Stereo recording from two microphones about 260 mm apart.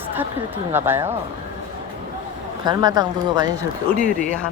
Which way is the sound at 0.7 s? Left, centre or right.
Centre.